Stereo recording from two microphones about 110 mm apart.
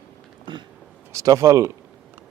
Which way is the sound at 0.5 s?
45° right (ahead or behind).